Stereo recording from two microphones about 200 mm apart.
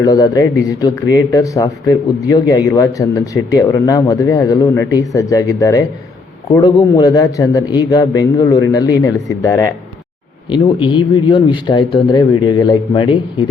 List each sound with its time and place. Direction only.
0.0 s speech: 20° left (ahead or behind)